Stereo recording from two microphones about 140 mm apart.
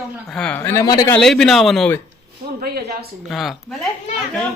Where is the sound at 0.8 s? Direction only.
25° left (ahead or behind).